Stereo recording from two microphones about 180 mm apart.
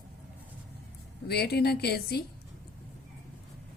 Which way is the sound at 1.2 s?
65° left (ahead or behind).